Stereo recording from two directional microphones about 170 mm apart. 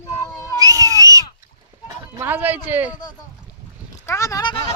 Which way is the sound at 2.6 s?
10° right (ahead or behind).